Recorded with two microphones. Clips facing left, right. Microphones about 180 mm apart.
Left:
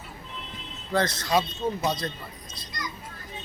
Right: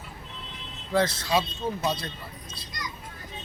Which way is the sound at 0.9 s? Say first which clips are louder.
Even; 5° right (ahead or behind).